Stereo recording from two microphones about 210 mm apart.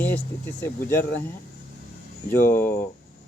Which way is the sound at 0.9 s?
45° left (ahead or behind).